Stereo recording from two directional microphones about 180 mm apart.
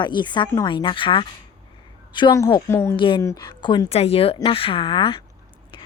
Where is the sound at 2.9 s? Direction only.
30° left (ahead or behind).